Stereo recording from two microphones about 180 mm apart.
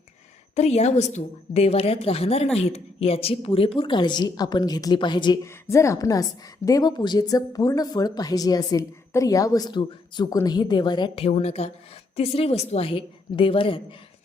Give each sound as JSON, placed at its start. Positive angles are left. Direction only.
{"t": 0.5, "sound": "a woman's voice", "side_deg": 35}